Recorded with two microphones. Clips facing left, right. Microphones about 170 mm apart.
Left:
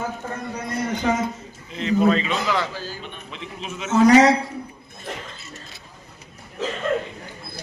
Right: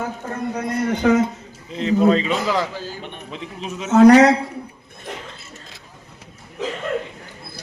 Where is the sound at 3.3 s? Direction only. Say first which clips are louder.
Right 3 dB; 40° right (ahead or behind).